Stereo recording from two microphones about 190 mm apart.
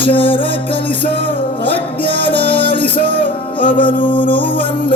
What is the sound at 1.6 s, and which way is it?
Music, 65° right (ahead or behind).